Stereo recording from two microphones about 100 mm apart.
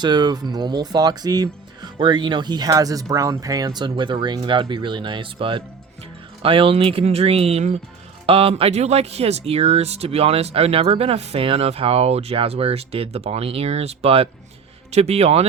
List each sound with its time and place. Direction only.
0.0 s speech: 45° right (ahead or behind); by 7.8 s 85° right
8.3 s a man's voice: 70° right (ahead or behind); by 15.4 s 90° right